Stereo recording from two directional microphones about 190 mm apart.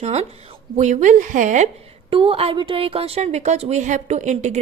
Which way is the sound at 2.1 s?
30° right (ahead or behind).